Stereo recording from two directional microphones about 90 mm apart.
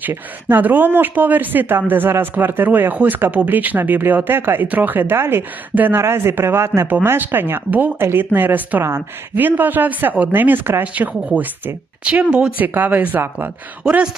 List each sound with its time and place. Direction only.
0.0 s speech: 20° right (ahead or behind)
13.8 s speech: 10° right (ahead or behind)